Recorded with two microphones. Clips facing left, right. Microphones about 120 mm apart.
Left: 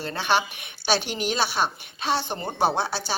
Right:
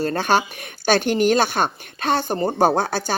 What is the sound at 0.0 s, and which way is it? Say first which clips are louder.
A woman's voice: right 5 dB; 45° right (ahead or behind).